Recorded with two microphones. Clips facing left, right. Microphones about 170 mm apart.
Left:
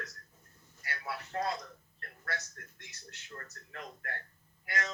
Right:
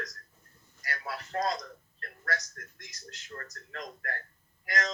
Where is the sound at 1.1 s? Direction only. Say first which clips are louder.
Left 1 dB; 90° right.